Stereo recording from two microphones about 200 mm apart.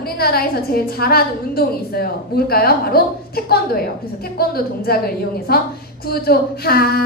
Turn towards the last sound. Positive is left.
turn(degrees=50)  # may be behind; listen again after turning